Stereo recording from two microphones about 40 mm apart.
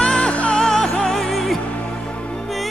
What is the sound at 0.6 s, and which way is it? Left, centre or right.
Music, centre.